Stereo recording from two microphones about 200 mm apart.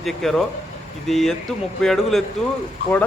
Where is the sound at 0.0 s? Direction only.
Centre (ahead or behind).